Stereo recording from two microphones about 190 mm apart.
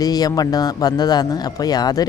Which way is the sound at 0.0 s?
20° left (ahead or behind).